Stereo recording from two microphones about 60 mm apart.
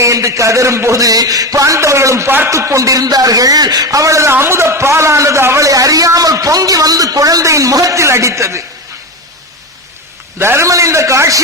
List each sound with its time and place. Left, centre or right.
0.0 s a sound: right
1.8 s a man's voice: right
4.3 s a man's voice: right
5.6 s a man's voice: right
10.3 s a man's voice: right
10.6 s a sound: right